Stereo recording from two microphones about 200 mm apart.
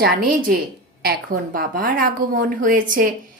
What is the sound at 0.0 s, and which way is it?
Speech, 45° right (ahead or behind).